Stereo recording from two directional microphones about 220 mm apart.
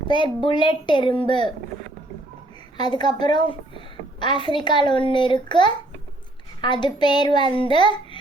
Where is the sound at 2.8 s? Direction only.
20° left (ahead or behind).